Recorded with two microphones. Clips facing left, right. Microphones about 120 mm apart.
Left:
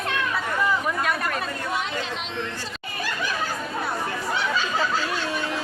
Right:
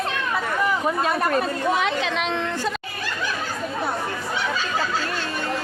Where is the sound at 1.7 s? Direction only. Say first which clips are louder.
Right 6 dB; 85° right.